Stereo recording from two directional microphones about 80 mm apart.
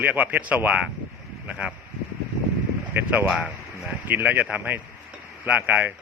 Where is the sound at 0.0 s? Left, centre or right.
Right.